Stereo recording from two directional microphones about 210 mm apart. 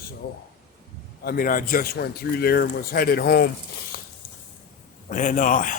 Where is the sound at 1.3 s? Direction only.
40° left (ahead or behind).